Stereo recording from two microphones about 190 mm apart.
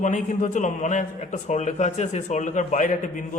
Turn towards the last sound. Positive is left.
turn(degrees=40)  # may be behind; listen again after turning